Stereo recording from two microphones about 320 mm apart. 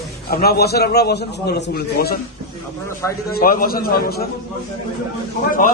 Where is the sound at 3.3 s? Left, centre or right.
Left.